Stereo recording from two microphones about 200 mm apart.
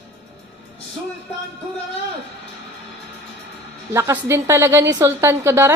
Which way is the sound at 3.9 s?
10° right (ahead or behind).